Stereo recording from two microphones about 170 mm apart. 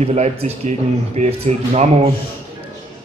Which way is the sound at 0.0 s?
40° right (ahead or behind).